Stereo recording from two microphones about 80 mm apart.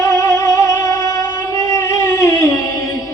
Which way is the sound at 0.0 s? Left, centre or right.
Left.